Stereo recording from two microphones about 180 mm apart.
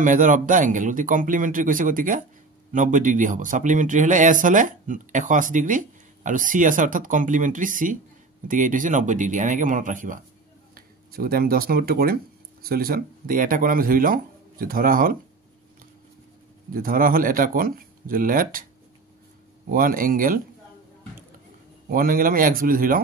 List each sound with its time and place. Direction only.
0.0 s speech: 45° right (ahead or behind)
16.7 s speech: 50° right (ahead or behind)
19.7 s speech: 50° right (ahead or behind)
21.8 s speech: 50° right (ahead or behind)